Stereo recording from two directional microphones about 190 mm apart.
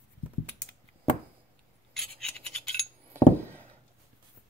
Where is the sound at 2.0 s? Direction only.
Centre (ahead or behind).